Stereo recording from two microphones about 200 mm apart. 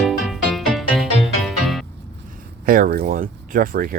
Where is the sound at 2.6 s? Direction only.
45° right (ahead or behind).